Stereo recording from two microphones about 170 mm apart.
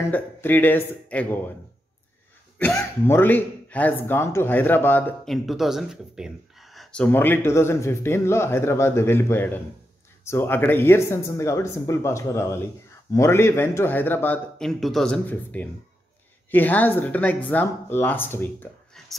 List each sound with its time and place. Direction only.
0.1 s speech: 10° left (ahead or behind)
2.8 s speech: 10° left (ahead or behind)